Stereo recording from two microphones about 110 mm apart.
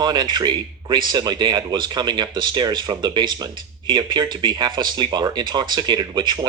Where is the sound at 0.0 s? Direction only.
40° right (ahead or behind).